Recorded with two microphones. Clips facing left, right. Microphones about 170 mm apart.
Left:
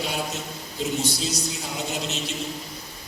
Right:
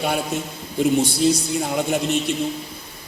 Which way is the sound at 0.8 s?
55° right (ahead or behind).